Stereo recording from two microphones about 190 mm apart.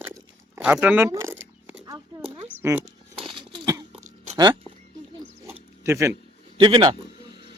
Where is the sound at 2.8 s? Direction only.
25° right (ahead or behind).